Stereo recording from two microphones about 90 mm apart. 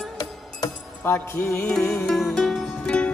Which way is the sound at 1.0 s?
25° left (ahead or behind).